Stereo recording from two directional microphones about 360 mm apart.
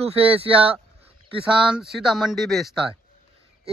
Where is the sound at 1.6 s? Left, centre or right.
Centre.